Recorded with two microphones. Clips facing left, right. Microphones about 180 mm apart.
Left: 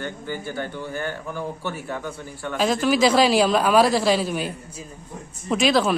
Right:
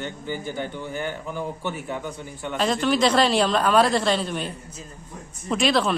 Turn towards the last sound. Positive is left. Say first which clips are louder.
# left 2 dB
turn(degrees=0)  # may be behind; listen again after turning